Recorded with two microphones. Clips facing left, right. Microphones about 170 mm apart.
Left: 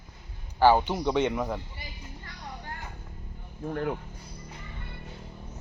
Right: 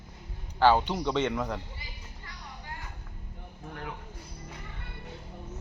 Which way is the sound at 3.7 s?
50° left (ahead or behind).